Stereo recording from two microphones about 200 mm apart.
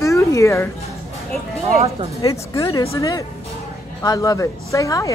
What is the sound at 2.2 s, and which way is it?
Speech, 15° left (ahead or behind).